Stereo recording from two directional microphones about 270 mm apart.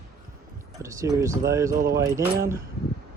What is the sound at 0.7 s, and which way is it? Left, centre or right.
Speech, centre.